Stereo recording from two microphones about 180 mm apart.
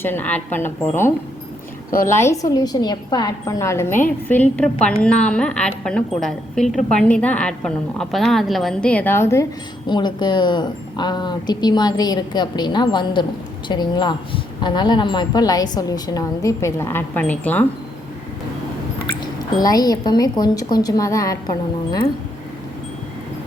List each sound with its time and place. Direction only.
0.0 s a woman's voice: 10° left (ahead or behind)
2.1 s a woman's voice: 15° left (ahead or behind)
19.5 s a woman's voice: 20° left (ahead or behind)